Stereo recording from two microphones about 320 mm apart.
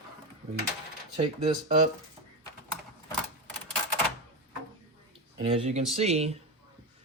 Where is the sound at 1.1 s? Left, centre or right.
Centre.